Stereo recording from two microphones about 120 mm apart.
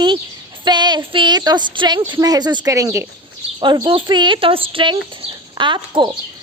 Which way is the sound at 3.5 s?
40° right (ahead or behind).